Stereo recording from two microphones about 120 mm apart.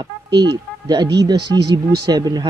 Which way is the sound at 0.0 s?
40° right (ahead or behind).